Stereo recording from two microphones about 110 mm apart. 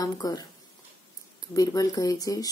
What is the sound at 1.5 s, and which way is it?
Speech, 30° left (ahead or behind).